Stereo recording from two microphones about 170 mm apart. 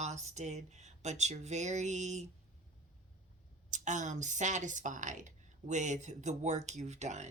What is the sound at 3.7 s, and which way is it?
Speech, 45° right (ahead or behind).